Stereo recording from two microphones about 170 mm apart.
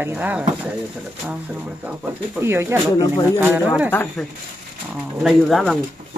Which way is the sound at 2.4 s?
15° right (ahead or behind).